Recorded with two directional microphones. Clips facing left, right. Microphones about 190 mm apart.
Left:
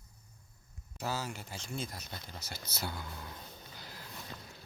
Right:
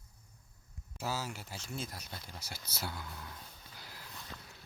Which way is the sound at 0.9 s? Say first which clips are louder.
Left 1 dB; 5° right (ahead or behind).